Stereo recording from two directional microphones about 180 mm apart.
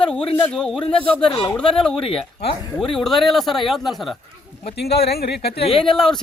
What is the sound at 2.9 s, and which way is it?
Speech, centre (ahead or behind).